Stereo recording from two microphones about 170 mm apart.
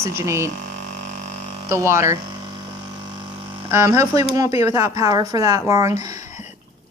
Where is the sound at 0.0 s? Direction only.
15° right (ahead or behind).